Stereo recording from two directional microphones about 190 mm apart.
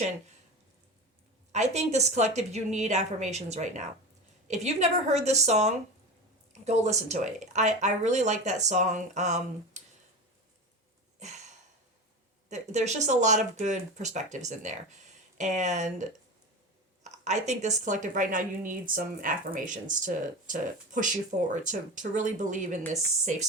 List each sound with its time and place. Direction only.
1.5 s speech: 35° right (ahead or behind)
11.2 s sniff: 40° right (ahead or behind)
12.5 s a woman's voice: 40° right (ahead or behind)